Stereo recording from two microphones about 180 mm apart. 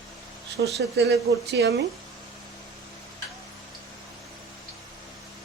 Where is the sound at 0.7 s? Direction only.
65° right (ahead or behind).